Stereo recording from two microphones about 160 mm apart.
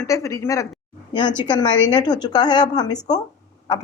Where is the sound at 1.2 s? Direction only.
30° left (ahead or behind).